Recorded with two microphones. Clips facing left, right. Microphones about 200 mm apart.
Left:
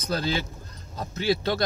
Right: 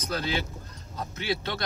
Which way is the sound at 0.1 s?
35° left (ahead or behind).